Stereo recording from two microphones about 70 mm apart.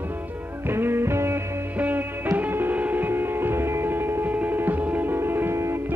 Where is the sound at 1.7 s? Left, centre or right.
Right.